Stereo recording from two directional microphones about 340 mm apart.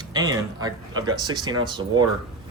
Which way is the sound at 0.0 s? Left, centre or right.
Centre.